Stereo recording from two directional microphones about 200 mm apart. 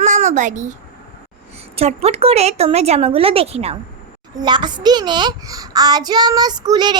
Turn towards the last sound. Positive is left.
turn(degrees=-20)  # may be behind; listen again after turning